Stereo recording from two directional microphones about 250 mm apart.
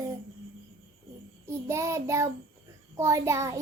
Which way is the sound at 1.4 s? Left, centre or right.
Centre.